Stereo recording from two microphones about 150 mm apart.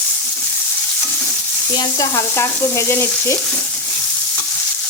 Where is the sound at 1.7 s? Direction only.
25° left (ahead or behind).